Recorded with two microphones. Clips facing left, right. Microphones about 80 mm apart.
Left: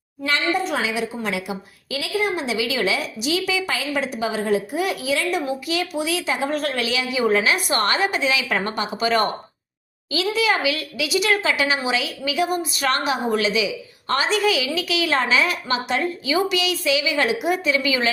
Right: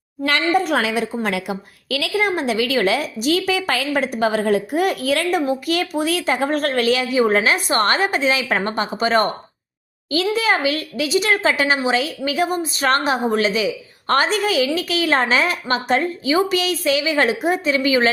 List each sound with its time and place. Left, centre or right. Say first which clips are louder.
0.3 s a woman's voice: right 4 dB; right